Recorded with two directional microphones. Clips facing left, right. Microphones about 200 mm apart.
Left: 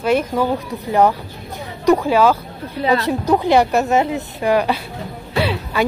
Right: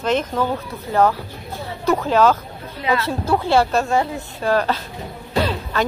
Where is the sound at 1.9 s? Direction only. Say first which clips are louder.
Left 3 dB; 10° left (ahead or behind).